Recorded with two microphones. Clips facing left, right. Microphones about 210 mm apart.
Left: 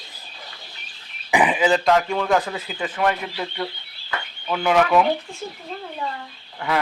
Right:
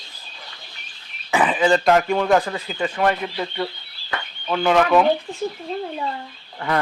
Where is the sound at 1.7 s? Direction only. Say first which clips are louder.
Right 2 dB; 5° right (ahead or behind).